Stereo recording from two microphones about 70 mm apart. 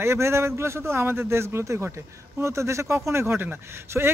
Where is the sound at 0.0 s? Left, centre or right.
Right.